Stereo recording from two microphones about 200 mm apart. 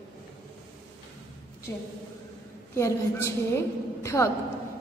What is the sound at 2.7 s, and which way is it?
A woman's voice, 15° left (ahead or behind).